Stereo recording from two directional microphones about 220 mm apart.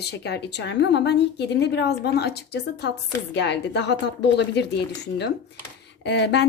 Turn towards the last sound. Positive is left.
turn(degrees=50)  # may be behind; listen again after turning